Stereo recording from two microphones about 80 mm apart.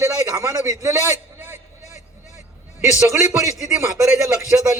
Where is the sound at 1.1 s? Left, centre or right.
Right.